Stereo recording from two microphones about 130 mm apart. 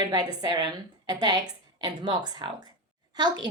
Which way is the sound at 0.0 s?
30° right (ahead or behind).